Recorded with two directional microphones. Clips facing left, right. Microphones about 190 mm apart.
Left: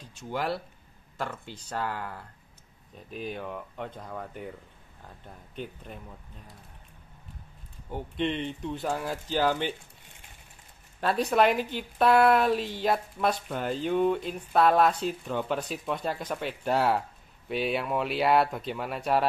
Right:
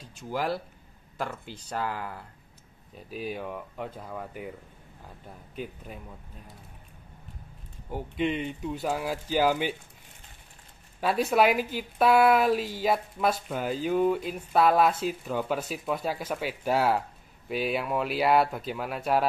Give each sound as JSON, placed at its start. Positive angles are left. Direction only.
{"t": 0.3, "sound": "speech", "side_deg": -5}
{"t": 7.9, "sound": "speech", "side_deg": -5}
{"t": 11.0, "sound": "speech", "side_deg": -5}